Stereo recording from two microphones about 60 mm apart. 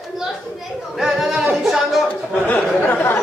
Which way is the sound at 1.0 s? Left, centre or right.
Centre.